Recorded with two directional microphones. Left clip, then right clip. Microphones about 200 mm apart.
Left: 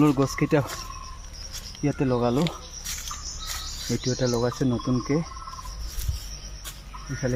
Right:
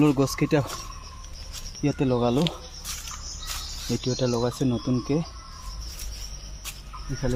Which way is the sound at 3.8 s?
Centre (ahead or behind).